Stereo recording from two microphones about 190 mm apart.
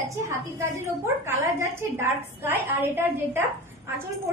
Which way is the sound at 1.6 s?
10° right (ahead or behind).